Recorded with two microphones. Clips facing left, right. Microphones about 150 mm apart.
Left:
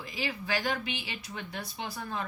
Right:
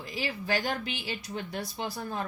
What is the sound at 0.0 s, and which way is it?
Speech, 40° right (ahead or behind).